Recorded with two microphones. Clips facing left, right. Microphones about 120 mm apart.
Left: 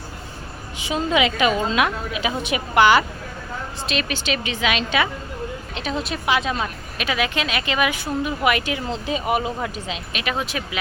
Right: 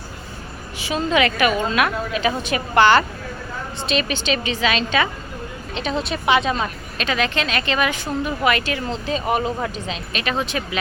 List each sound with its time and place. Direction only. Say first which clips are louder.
0.8 s a woman's voice: right 1 dB; 15° left (ahead or behind)